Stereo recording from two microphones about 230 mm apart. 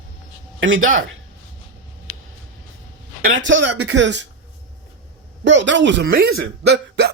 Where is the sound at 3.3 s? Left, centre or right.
Right.